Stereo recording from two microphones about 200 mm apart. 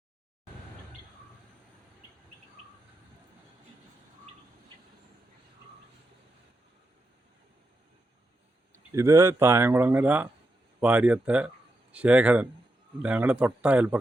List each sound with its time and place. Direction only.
8.7 s speech: 15° right (ahead or behind)